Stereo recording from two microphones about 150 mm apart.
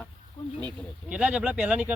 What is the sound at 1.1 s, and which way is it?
Speech, 5° right (ahead or behind).